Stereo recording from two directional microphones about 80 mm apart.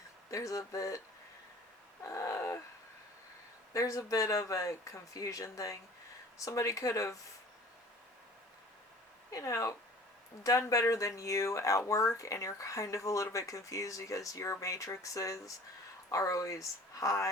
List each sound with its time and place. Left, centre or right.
0.3 s speech: left
2.0 s speech: left
3.7 s speech: left
9.3 s speech: left